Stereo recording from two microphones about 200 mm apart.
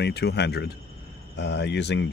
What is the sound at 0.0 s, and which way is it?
Speech, 55° left (ahead or behind).